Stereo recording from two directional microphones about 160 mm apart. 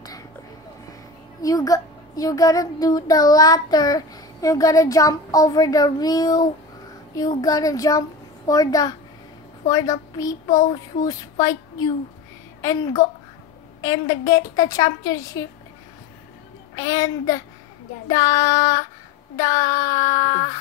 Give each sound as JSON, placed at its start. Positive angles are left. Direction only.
{"t": 1.4, "sound": "a child's voice", "side_deg": 20}
{"t": 16.7, "sound": "a child's voice", "side_deg": 20}